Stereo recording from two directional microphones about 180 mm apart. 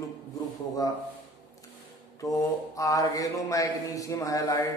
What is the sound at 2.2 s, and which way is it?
A man's voice, 20° left (ahead or behind).